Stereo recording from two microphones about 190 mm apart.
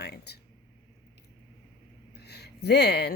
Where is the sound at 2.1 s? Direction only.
60° left (ahead or behind).